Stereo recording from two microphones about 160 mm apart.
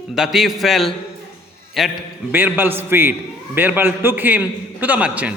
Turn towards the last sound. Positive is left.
turn(degrees=-10)  # may be behind; listen again after turning